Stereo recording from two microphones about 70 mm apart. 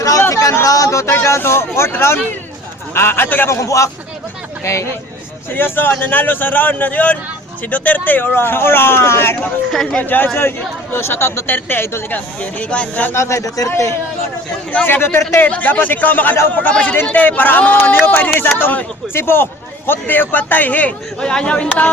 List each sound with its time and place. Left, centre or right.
0.2 s speech: left
1.4 s speech: left
3.5 s a man's voice: left
5.5 s speech: left
9.8 s speech: centre
12.4 s speech: centre
13.1 s a man's voice: left
14.8 s speech: left
15.4 s speech: left
21.2 s speech: centre